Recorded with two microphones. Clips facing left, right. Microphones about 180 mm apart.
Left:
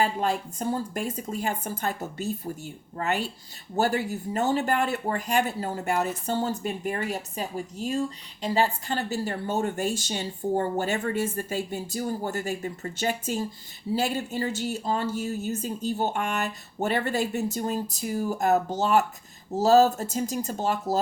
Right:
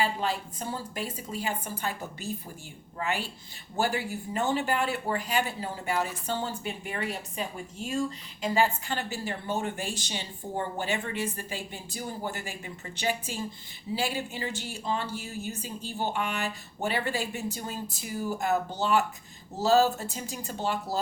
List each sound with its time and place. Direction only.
0.0 s speech: 45° left (ahead or behind)